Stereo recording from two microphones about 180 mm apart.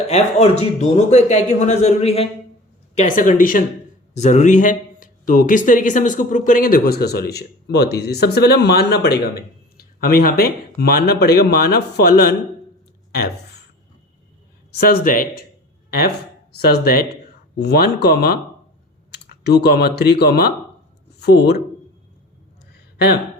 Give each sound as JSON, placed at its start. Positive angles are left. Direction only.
{"t": 0.1, "sound": "speech", "side_deg": 35}
{"t": 13.1, "sound": "a sound", "side_deg": 60}
{"t": 15.0, "sound": "speech", "side_deg": 50}